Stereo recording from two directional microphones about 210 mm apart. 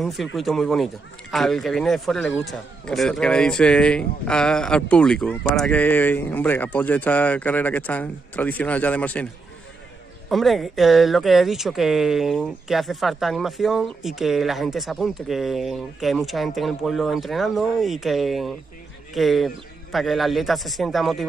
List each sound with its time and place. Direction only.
0.0 s speech: centre (ahead or behind)
10.3 s speech: centre (ahead or behind)